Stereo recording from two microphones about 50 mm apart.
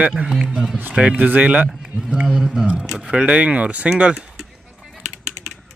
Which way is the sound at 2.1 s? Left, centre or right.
Centre.